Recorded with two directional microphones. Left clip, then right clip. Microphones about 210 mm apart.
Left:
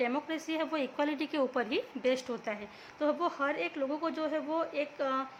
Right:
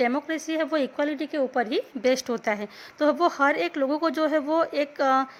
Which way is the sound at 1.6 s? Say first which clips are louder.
Right 7 dB; 25° right (ahead or behind).